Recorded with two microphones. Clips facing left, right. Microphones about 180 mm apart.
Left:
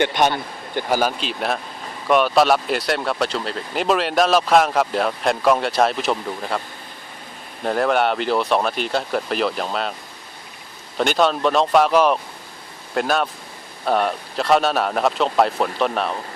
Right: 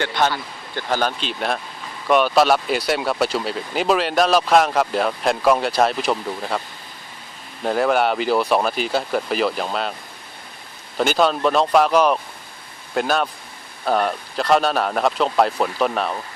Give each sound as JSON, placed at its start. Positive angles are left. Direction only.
{"t": 0.0, "sound": "speech", "side_deg": 20}
{"t": 7.6, "sound": "speech", "side_deg": 0}
{"t": 10.9, "sound": "speech", "side_deg": 0}